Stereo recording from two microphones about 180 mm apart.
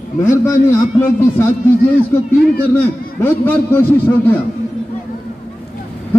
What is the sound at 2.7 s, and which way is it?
A man's voice, 10° left (ahead or behind).